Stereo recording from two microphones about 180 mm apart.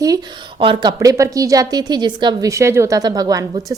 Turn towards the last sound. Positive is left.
turn(degrees=-20)  # may be behind; listen again after turning